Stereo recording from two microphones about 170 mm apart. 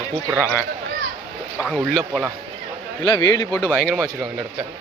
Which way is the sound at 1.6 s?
5° left (ahead or behind).